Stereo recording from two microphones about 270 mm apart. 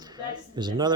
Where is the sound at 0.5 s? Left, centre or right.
Centre.